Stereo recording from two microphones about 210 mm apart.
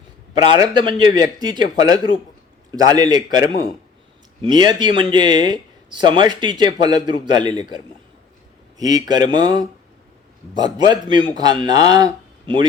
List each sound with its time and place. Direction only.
0.3 s speech: 20° right (ahead or behind)
2.7 s speech: 20° right (ahead or behind)
8.8 s speech: 20° right (ahead or behind)